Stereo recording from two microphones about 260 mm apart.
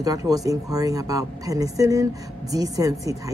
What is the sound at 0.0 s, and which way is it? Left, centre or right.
A woman's voice, centre.